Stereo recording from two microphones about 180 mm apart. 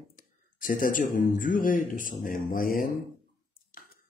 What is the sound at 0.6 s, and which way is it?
Speech, 50° left (ahead or behind).